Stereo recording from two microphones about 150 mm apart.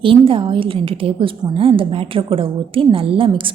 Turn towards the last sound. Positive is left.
turn(degrees=-35)  # may be behind; listen again after turning